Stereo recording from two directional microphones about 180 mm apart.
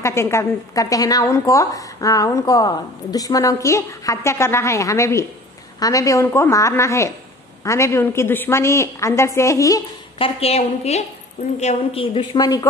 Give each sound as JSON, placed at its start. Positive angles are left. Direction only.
{"t": 0.0, "sound": "a woman's voice", "side_deg": 15}